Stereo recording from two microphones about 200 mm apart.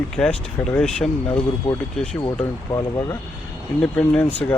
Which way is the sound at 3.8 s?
5° left (ahead or behind).